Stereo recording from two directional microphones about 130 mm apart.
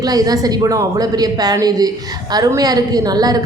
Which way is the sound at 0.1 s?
30° right (ahead or behind).